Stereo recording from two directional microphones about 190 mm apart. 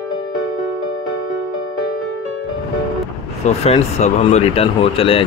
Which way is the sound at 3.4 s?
35° left (ahead or behind).